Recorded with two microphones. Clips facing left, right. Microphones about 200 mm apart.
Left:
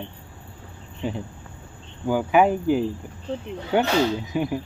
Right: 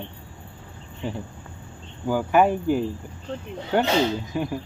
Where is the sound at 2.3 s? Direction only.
5° left (ahead or behind).